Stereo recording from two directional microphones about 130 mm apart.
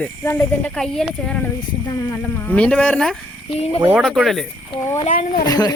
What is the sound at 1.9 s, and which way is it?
Speech, 20° left (ahead or behind).